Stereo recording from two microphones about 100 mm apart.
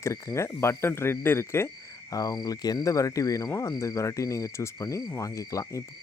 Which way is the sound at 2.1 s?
40° left (ahead or behind).